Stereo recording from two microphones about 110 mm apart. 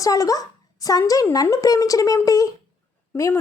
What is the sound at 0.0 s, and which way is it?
A child's voice, 30° left (ahead or behind).